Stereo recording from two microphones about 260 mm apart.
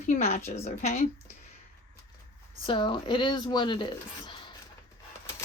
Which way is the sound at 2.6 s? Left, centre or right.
Centre.